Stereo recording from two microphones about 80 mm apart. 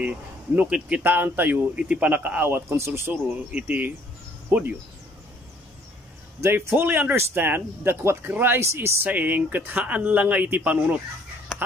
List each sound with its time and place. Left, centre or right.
0.6 s speech: centre; by 3.0 s right
3.1 s speech: right
6.4 s speech: right
9.1 s speech: right